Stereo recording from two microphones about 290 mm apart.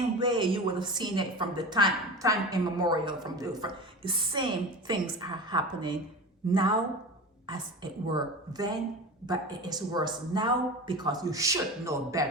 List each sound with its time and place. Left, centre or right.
0.2 s a woman's voice: centre